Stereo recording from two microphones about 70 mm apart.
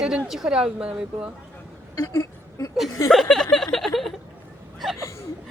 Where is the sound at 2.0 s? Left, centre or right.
Left.